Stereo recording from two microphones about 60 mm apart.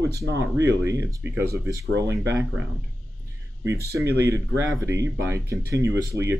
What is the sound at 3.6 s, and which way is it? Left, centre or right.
Speech, right.